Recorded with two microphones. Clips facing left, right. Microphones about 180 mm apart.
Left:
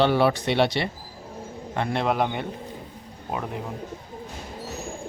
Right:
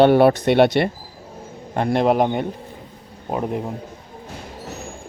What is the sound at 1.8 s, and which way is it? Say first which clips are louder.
Speech: right 7 dB; 40° right (ahead or behind).